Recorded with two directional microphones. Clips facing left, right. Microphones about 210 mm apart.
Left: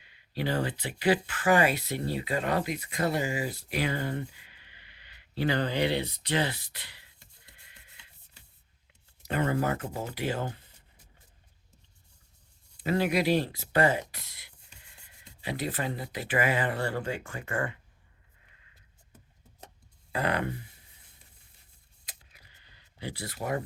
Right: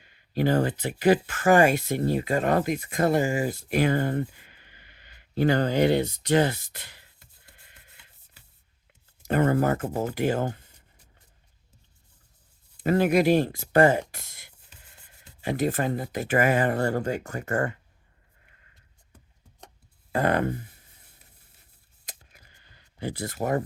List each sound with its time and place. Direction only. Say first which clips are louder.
0.0 s speech: right 7 dB; 45° right (ahead or behind)
9.2 s speech: right 6 dB; 50° right (ahead or behind)
12.8 s speech: right 6 dB; 50° right (ahead or behind)
20.1 s speech: right 6 dB; 45° right (ahead or behind)
22.0 s a sound: right 5 dB; 45° right (ahead or behind)